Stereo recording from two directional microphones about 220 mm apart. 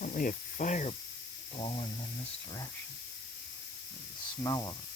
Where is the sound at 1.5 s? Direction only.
25° left (ahead or behind).